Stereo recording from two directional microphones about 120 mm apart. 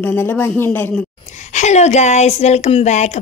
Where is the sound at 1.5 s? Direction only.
75° left (ahead or behind).